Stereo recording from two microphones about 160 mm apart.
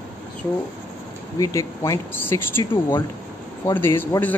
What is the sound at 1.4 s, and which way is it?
Speech, 20° left (ahead or behind).